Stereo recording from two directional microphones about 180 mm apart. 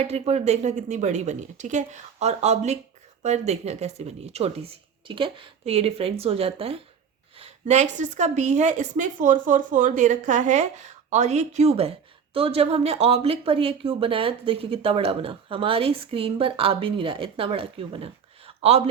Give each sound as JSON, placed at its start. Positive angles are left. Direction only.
{"t": 0.1, "sound": "a woman's voice", "side_deg": -35}